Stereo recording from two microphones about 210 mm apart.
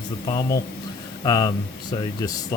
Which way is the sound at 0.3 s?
20° left (ahead or behind).